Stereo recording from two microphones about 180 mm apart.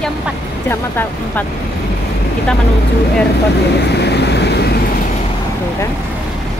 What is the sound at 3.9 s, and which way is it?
Vehicle, 70° left (ahead or behind).